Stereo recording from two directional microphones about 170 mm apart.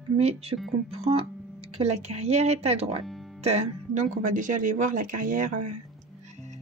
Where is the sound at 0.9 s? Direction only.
35° right (ahead or behind).